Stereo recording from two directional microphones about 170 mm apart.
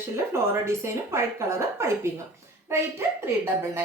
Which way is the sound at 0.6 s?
15° right (ahead or behind).